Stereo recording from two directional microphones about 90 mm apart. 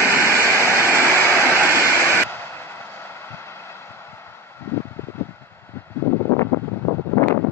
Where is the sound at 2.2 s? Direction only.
30° left (ahead or behind).